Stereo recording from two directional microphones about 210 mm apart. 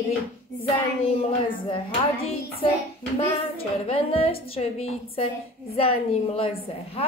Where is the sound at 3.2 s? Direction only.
25° left (ahead or behind).